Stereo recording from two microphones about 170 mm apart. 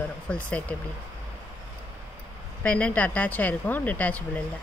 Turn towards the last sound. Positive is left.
turn(degrees=10)  # may be behind; listen again after turning